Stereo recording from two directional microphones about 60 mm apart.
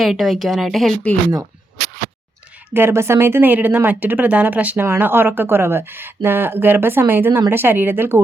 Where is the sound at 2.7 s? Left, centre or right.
Right.